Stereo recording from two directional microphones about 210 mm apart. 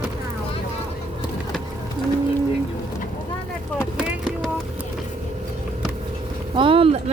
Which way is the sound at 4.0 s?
Centre (ahead or behind).